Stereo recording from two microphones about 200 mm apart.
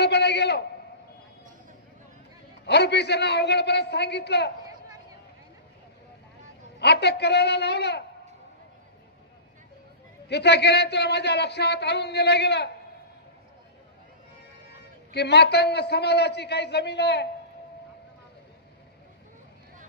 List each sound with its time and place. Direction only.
0.0 s a sound: 55° left (ahead or behind)
2.6 s a man's voice: 55° left (ahead or behind)
6.8 s a man's voice: 55° left (ahead or behind)
10.2 s a man's voice: 60° left (ahead or behind)
15.1 s a man's voice: 55° left (ahead or behind)